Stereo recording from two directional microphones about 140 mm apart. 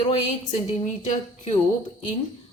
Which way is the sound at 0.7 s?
55° left (ahead or behind).